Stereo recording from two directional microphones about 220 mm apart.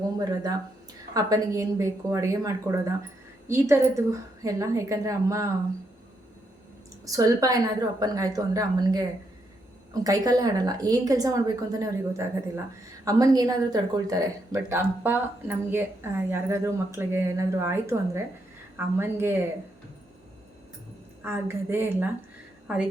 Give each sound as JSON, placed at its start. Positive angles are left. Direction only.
{"t": 0.2, "sound": "speech", "side_deg": -15}
{"t": 7.0, "sound": "speech", "side_deg": -15}
{"t": 21.2, "sound": "a woman's voice", "side_deg": -10}